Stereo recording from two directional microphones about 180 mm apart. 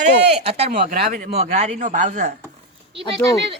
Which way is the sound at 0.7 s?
50° right (ahead or behind).